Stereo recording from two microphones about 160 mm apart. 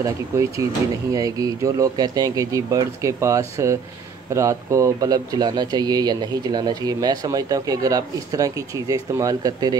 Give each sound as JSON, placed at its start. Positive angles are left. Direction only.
{"t": 0.0, "sound": "speech", "side_deg": -20}